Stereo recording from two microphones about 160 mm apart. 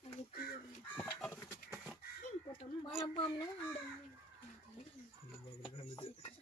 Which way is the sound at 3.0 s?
35° left (ahead or behind).